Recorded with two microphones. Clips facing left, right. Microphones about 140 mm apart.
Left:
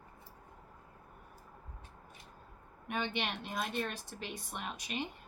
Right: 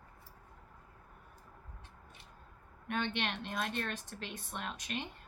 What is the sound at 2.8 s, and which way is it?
A woman's voice, 10° left (ahead or behind).